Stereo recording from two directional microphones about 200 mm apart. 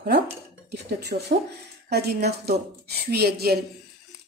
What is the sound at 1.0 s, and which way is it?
Speech, 55° right (ahead or behind).